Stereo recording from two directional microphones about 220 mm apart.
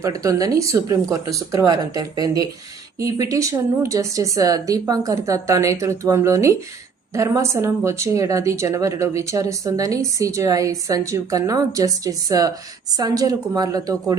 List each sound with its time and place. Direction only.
0.0 s speech: 15° right (ahead or behind)